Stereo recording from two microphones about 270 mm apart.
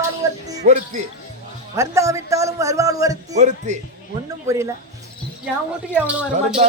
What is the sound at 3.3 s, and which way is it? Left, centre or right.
Speech, right.